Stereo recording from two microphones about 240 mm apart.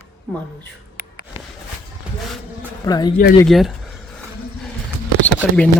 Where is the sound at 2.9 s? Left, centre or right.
Centre.